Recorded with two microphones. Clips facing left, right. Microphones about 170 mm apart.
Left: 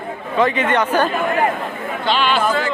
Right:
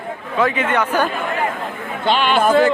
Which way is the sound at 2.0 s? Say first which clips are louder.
Right 2 dB; 50° right (ahead or behind).